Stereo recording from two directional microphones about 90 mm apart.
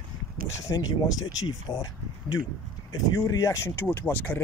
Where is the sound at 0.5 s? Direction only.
35° left (ahead or behind).